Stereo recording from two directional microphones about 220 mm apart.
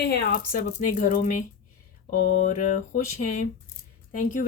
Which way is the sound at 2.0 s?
40° left (ahead or behind).